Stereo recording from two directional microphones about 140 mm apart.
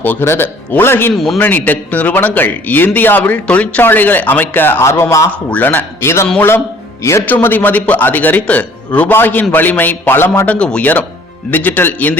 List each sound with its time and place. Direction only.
0.0 s a man's voice: 15° left (ahead or behind)
1.1 s a man's voice: centre (ahead or behind)
1.4 s a man's voice: 15° left (ahead or behind)